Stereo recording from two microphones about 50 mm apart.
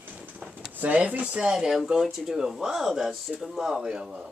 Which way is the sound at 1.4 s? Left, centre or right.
Centre.